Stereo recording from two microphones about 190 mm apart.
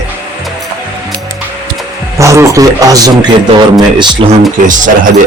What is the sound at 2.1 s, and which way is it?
Speech, 15° right (ahead or behind).